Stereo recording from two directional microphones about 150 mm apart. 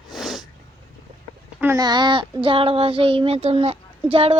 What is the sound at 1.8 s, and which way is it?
Child singing, 30° right (ahead or behind).